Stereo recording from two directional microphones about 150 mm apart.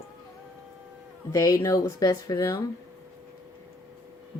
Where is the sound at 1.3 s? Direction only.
20° left (ahead or behind).